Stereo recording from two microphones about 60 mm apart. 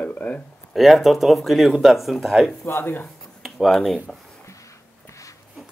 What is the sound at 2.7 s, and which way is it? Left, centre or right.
Speech, left.